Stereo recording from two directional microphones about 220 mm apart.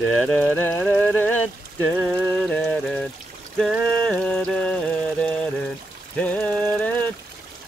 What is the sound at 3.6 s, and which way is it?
Mantra, centre (ahead or behind).